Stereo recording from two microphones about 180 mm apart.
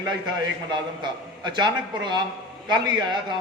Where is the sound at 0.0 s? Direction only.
25° right (ahead or behind).